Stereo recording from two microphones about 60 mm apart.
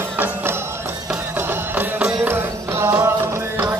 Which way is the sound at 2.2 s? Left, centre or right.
Right.